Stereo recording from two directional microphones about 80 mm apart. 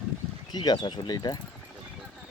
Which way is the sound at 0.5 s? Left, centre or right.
Left.